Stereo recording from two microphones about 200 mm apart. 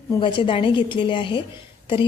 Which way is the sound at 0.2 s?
25° left (ahead or behind).